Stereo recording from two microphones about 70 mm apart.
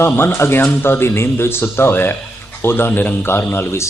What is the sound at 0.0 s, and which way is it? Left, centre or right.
A man's voice, left.